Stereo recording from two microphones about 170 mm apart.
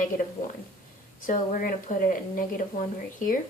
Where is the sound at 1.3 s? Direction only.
50° left (ahead or behind).